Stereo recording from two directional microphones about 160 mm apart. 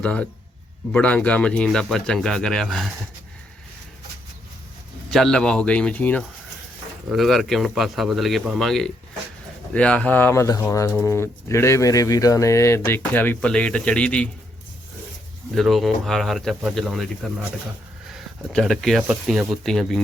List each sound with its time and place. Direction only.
0.0 s speech: 10° left (ahead or behind)
5.1 s speech: 5° left (ahead or behind)
15.5 s speech: centre (ahead or behind)
18.5 s speech: 5° left (ahead or behind)